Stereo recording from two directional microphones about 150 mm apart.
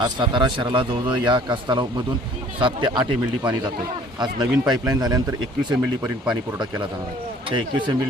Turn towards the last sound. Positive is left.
turn(degrees=-30)  # may be behind; listen again after turning